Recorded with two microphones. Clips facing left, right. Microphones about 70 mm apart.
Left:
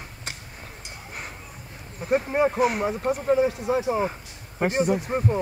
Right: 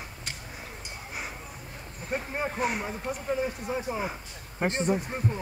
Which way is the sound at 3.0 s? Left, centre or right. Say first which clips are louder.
Left 8 dB; left.